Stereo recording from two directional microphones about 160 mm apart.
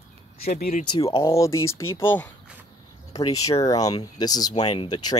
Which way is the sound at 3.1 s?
25° left (ahead or behind).